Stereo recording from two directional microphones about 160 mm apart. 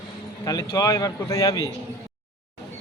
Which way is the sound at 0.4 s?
25° left (ahead or behind).